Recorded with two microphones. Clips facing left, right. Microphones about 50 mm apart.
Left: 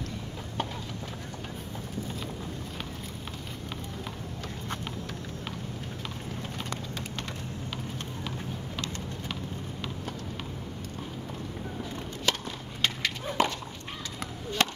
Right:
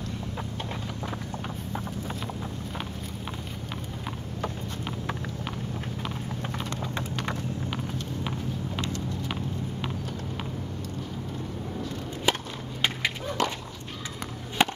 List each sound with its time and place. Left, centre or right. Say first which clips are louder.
12.3 s skateboard: right 3 dB; centre
13.4 s dog: left 1 dB; centre
14.6 s chop: right 4 dB; centre